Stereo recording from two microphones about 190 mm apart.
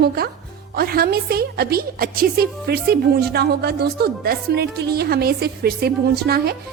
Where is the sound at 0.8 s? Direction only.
50° right (ahead or behind).